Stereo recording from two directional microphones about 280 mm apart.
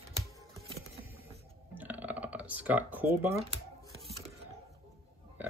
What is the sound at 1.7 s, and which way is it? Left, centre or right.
Typing, centre.